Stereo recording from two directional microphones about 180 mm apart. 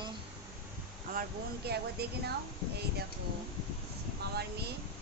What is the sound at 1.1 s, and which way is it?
Speech, 50° right (ahead or behind).